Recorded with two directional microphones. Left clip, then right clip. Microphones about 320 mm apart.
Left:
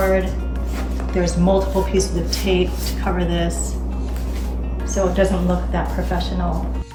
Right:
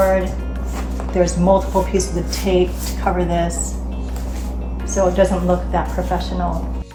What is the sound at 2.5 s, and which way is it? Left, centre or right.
Speech, right.